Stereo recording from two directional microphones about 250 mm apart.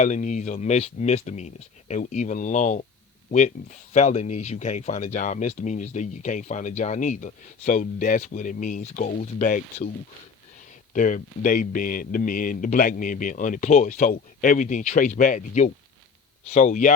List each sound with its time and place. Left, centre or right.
0.0 s speech: left
10.9 s speech: left